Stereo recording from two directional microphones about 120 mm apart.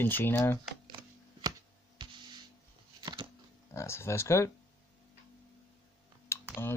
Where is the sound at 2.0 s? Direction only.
40° right (ahead or behind).